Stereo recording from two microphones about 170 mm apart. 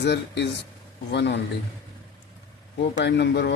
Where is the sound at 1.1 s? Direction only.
90° left.